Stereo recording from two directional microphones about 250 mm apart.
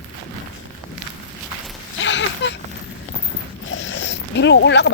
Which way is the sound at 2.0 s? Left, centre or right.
Left.